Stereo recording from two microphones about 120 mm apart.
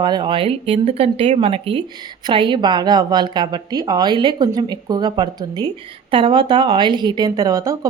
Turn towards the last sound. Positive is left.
turn(degrees=-30)  # may be behind; listen again after turning